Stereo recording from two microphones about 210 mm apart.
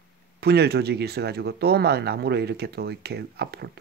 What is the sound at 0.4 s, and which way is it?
Speech, 50° right (ahead or behind).